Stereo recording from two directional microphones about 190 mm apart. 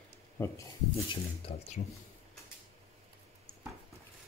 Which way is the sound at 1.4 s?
30° left (ahead or behind).